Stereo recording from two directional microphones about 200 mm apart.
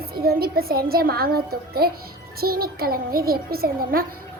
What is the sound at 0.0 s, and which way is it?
A child's voice, 50° right (ahead or behind).